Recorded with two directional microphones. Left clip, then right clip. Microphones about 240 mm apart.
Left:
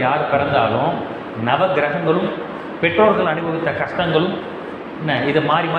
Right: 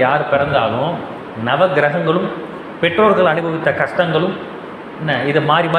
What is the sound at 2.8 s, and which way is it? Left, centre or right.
A man's voice, right.